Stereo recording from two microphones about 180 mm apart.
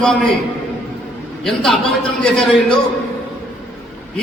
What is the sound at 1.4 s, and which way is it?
A man's voice, centre (ahead or behind).